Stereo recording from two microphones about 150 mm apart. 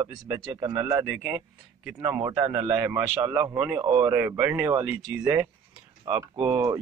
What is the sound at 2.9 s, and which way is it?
Speech, 5° right (ahead or behind).